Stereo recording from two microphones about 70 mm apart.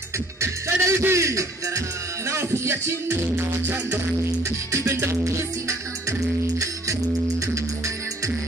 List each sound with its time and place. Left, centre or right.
0.4 s music: right
4.7 s music: right